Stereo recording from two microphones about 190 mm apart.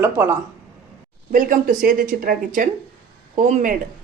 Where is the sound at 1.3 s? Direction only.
45° right (ahead or behind).